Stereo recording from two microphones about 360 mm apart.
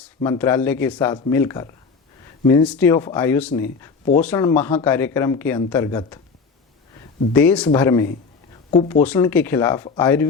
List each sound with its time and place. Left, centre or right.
0.0 s speech: centre
7.3 s speech: centre
9.0 s speech: centre